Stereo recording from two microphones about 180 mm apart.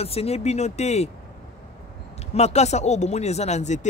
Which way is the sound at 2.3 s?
35° left (ahead or behind).